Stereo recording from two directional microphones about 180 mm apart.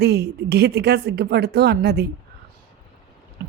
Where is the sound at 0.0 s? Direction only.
65° right (ahead or behind).